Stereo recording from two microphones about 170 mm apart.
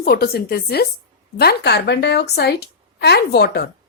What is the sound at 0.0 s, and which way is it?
A woman's voice, 65° left (ahead or behind).